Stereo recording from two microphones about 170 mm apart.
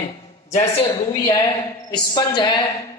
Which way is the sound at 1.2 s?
25° left (ahead or behind).